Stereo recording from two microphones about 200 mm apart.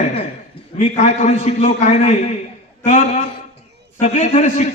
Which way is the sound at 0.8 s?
35° left (ahead or behind).